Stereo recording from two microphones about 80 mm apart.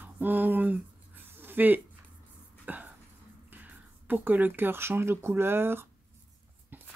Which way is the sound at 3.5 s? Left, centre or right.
Right.